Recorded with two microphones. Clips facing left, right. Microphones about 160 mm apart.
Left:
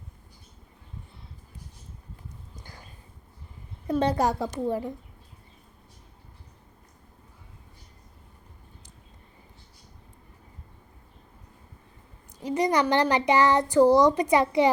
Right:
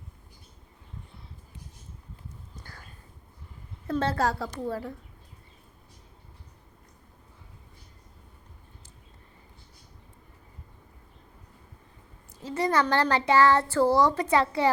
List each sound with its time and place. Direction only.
2.6 s a sound: 15° left (ahead or behind)
3.8 s speech: 15° left (ahead or behind)
12.4 s speech: 15° left (ahead or behind)